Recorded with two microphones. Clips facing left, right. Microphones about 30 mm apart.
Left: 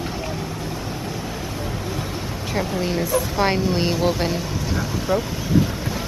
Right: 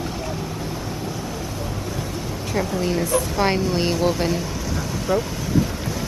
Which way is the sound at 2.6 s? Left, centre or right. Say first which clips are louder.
Right 1 dB; centre.